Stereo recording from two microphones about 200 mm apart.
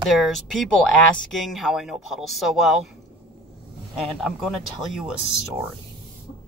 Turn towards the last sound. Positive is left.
turn(degrees=-5)  # may be behind; listen again after turning